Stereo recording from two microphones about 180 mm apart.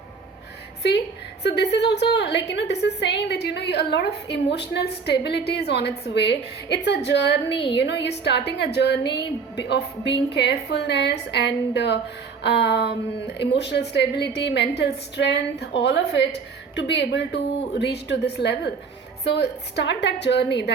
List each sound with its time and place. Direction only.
0.8 s a woman's voice: 70° left (ahead or behind)